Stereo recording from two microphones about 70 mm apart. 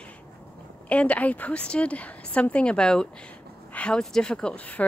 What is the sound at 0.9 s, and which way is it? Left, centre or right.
Speech, centre.